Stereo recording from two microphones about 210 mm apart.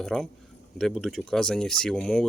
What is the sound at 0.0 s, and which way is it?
Speech, centre (ahead or behind).